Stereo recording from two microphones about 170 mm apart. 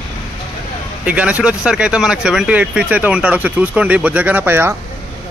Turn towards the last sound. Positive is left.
turn(degrees=-15)  # may be behind; listen again after turning